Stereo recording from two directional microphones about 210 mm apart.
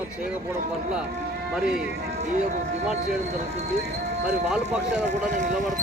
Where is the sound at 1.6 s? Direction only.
5° right (ahead or behind).